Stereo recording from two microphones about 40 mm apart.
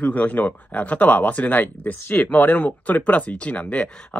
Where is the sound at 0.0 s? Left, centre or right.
Left.